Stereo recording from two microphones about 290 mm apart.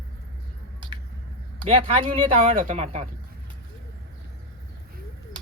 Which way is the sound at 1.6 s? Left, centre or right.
Centre.